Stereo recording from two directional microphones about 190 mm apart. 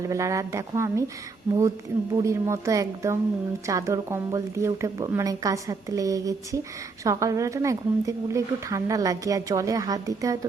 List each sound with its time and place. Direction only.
0.1 s a woman's voice: 15° right (ahead or behind)
2.1 s a woman's voice: 15° right (ahead or behind)